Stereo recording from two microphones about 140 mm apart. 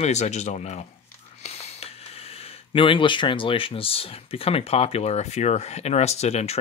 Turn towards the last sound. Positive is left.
turn(degrees=50)  # may be behind; listen again after turning